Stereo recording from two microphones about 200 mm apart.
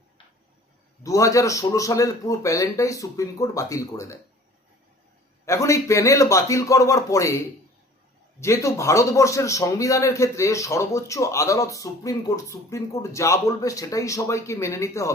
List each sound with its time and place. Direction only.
1.0 s a man's voice: 15° left (ahead or behind)
5.5 s a man's voice: 15° left (ahead or behind)